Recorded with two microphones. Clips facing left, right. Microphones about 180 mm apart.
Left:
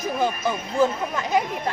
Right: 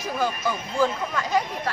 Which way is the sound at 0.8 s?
20° left (ahead or behind).